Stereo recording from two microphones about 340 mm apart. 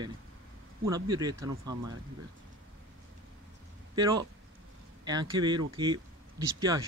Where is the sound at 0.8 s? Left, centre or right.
Centre.